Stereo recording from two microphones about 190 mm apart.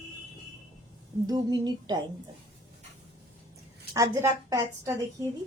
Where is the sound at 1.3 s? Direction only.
20° right (ahead or behind).